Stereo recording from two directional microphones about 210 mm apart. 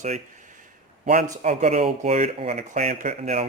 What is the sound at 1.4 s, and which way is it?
Speech, 30° right (ahead or behind).